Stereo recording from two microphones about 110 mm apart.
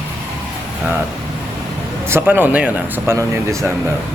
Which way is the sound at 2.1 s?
20° right (ahead or behind).